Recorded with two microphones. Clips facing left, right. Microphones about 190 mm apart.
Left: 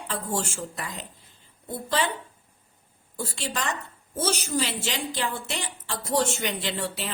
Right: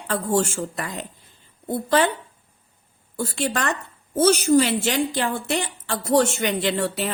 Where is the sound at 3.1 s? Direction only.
55° right (ahead or behind).